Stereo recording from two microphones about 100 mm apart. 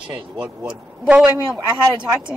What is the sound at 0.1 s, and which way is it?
A man's voice, 10° right (ahead or behind).